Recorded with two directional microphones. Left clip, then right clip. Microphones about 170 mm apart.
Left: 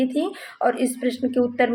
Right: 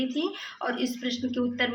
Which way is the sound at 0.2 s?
45° left (ahead or behind).